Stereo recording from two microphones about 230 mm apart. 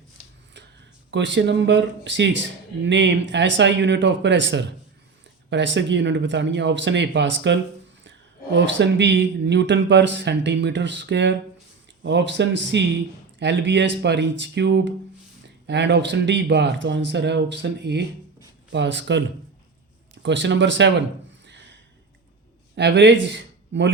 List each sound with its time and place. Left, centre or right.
1.1 s speech: right
20.2 s speech: right
21.4 s a sound: right
22.7 s speech: right